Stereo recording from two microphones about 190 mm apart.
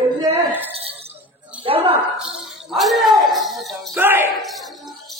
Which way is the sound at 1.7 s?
30° right (ahead or behind).